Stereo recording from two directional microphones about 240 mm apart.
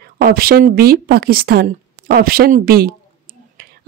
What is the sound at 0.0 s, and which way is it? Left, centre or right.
A woman's voice, right.